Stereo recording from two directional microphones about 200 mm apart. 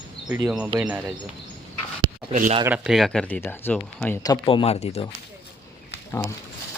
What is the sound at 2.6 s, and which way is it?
Speech, 5° right (ahead or behind).